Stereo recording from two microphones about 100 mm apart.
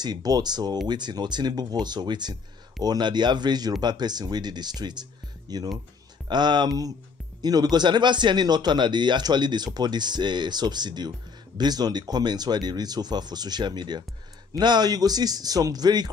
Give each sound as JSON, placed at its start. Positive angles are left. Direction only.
{"t": 0.0, "sound": "a man's voice", "side_deg": -40}